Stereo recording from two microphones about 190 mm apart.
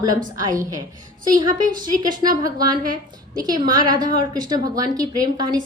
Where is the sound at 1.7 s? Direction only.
45° right (ahead or behind).